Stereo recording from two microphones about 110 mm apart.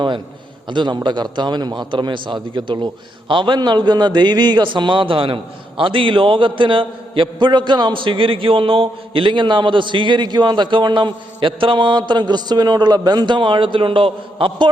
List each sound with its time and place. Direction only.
0.7 s a man's voice: 45° right (ahead or behind)